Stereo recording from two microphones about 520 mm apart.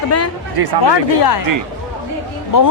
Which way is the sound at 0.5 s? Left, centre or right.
Right.